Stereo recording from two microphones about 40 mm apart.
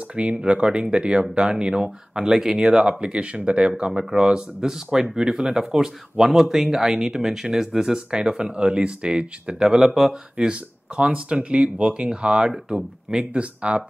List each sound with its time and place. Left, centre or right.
0.1 s speech: right
1.8 s speech: centre
2.7 s speech: right
13.2 s speech: right